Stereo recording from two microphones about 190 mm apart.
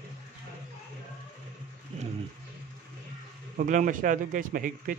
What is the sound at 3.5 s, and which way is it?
A man's voice, 45° right (ahead or behind).